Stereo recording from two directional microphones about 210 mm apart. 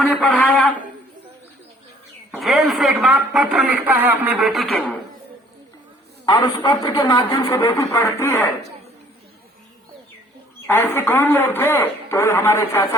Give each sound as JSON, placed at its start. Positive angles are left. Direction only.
{"t": 0.0, "sound": "a sound", "side_deg": 5}
{"t": 2.3, "sound": "speech", "side_deg": 0}
{"t": 6.2, "sound": "speech", "side_deg": 20}
{"t": 10.7, "sound": "speech", "side_deg": 10}